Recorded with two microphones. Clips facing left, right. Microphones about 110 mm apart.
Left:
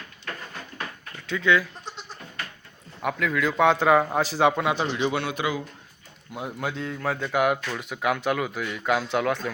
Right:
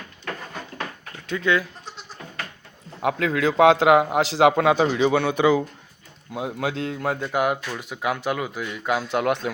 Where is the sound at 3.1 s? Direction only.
30° right (ahead or behind).